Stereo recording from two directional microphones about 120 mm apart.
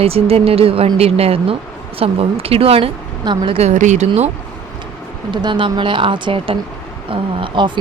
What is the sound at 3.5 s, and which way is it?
Speech, 75° right (ahead or behind).